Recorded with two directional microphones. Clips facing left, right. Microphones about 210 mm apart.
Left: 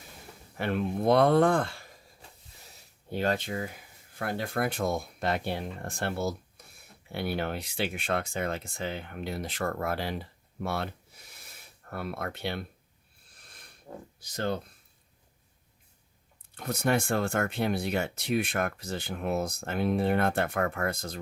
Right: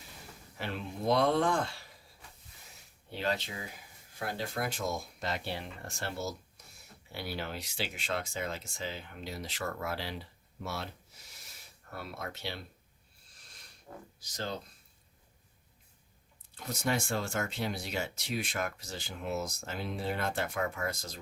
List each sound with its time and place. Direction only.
0.5 s speech: 55° left (ahead or behind)
3.1 s speech: 50° left (ahead or behind)
11.3 s a sound: 55° left (ahead or behind)
14.2 s speech: 55° left (ahead or behind)
16.6 s speech: 55° left (ahead or behind)